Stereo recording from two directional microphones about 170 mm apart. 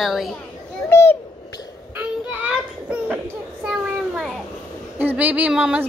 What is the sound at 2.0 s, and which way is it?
Child singing, 5° right (ahead or behind).